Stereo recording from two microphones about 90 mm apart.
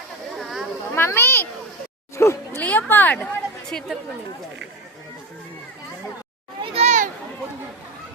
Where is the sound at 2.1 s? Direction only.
30° left (ahead or behind).